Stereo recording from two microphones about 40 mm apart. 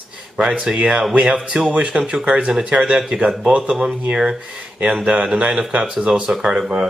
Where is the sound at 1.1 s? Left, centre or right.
Right.